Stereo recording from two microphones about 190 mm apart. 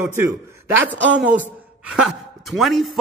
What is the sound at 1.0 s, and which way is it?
Speech, 70° right (ahead or behind).